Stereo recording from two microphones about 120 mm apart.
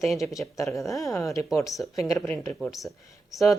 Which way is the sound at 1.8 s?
10° left (ahead or behind).